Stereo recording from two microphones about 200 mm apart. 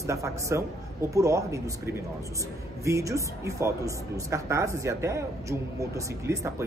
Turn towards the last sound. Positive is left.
turn(degrees=-15)  # may be behind; listen again after turning